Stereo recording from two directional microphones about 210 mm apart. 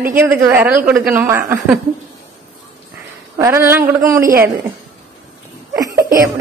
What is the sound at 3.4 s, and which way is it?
Speech, 10° right (ahead or behind).